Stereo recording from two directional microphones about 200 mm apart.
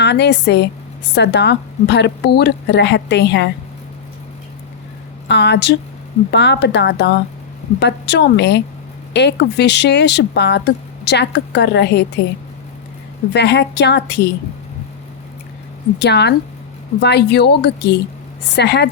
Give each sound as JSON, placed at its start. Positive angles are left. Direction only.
{"t": 0.0, "sound": "a woman's voice", "side_deg": 60}
{"t": 5.3, "sound": "a woman's voice", "side_deg": 60}
{"t": 13.3, "sound": "a woman's voice", "side_deg": 55}
{"t": 16.0, "sound": "a woman's voice", "side_deg": 55}